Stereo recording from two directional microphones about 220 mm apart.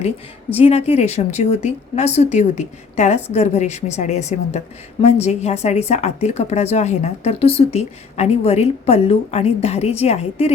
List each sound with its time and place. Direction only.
0.5 s a woman's voice: 30° left (ahead or behind)